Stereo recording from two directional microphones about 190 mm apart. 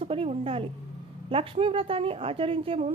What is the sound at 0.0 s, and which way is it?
A woman's voice, 30° right (ahead or behind).